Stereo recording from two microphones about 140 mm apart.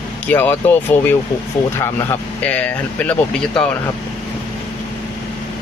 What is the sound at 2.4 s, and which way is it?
Speech, 10° left (ahead or behind).